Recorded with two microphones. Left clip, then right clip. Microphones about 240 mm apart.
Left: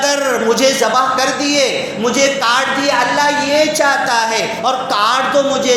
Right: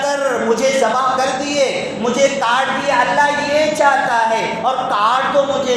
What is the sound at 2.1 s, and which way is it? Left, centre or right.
Speech, left.